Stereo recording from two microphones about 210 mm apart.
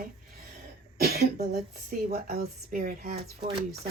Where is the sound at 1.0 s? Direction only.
50° right (ahead or behind).